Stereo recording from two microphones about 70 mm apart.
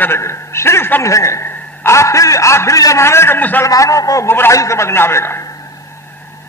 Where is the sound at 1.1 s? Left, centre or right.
Left.